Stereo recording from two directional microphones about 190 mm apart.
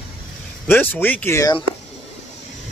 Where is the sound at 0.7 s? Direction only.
10° left (ahead or behind).